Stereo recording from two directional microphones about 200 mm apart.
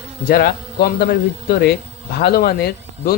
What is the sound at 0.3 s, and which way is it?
Speech, 50° left (ahead or behind).